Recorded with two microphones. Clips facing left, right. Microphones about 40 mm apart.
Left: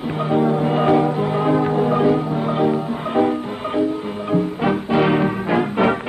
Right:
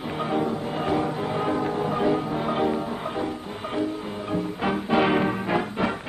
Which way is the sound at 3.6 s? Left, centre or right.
Centre.